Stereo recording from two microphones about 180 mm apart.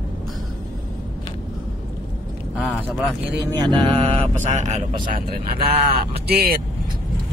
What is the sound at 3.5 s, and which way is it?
Mantra, 25° right (ahead or behind).